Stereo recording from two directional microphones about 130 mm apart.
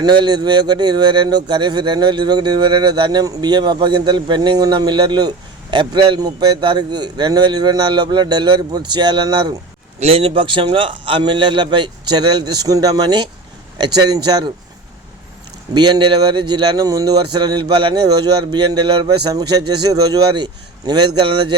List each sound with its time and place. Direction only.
0.0 s a man's voice: 35° right (ahead or behind)
10.0 s a man's voice: 50° right (ahead or behind); by 14.5 s 30° right (ahead or behind)
15.7 s a man's voice: 35° right (ahead or behind)